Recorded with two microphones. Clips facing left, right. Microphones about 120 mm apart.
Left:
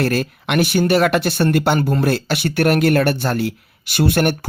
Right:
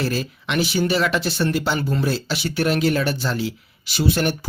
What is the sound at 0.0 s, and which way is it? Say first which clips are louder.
Speech: left 5 dB; 60° left (ahead or behind).